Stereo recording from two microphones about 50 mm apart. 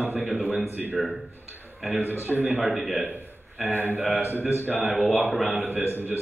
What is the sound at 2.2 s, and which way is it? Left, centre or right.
Speech, right.